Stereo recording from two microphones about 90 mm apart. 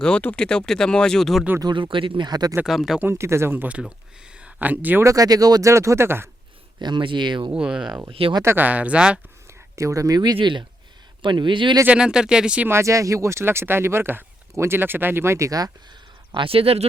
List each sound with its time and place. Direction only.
0.0 s speech: 15° left (ahead or behind)
1.6 s speech: 65° right (ahead or behind)
2.6 s speech: 5° right (ahead or behind)
3.0 s speech: 30° right (ahead or behind)
5.0 s speech: 40° right (ahead or behind)
6.7 s speech: 55° right (ahead or behind)
7.5 s speech: 10° right (ahead or behind)
8.2 s speech: 90° right
8.5 s speech: 20° right (ahead or behind)
9.7 s speech: 35° right (ahead or behind)
10.3 s speech: 60° right (ahead or behind)
11.9 s speech: 10° right (ahead or behind)
12.6 s speech: 30° right (ahead or behind)
16.3 s speech: 80° right